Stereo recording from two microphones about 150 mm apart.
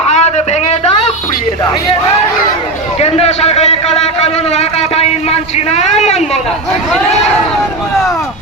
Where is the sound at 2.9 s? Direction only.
45° left (ahead or behind).